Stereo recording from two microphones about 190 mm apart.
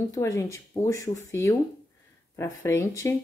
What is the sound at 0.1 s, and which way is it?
Speech, 15° left (ahead or behind).